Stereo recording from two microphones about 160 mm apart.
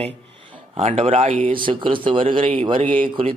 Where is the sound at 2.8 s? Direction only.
55° right (ahead or behind).